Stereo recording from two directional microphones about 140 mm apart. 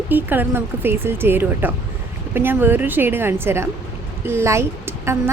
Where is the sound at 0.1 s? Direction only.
15° right (ahead or behind).